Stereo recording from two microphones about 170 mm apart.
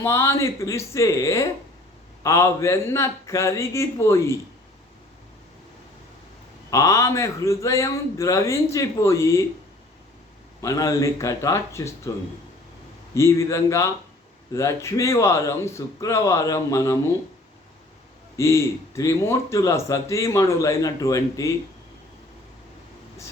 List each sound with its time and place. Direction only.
0.0 s a man's voice: 15° left (ahead or behind)
6.7 s a man's voice: 20° left (ahead or behind)
10.6 s a man's voice: 20° left (ahead or behind)
13.1 s a man's voice: 15° left (ahead or behind)
18.3 s a man's voice: 15° left (ahead or behind)